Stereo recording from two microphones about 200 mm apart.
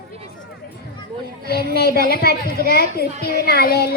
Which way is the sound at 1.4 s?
50° left (ahead or behind).